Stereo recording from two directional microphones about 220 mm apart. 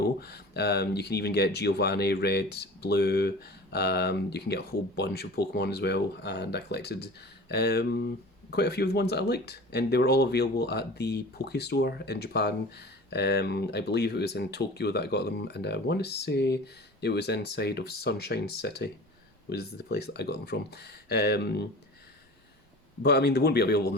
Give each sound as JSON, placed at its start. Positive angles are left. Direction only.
{"t": 0.2, "sound": "speech", "side_deg": 45}
{"t": 23.0, "sound": "speech", "side_deg": 45}